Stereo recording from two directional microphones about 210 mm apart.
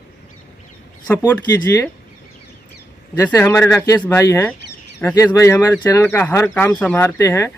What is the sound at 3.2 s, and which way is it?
Speech, 10° left (ahead or behind).